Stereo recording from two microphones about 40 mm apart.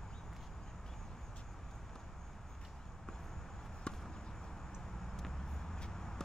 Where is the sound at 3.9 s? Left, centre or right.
Left.